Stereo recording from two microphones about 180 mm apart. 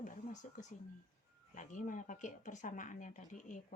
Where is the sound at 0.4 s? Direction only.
45° left (ahead or behind).